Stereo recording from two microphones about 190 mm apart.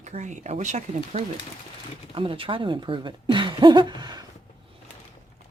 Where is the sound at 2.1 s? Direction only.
30° right (ahead or behind).